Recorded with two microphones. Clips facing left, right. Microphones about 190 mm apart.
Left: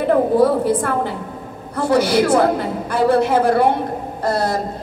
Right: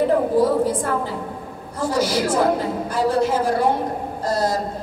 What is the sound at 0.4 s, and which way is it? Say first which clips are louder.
A woman's voice: left 3 dB; 65° left (ahead or behind).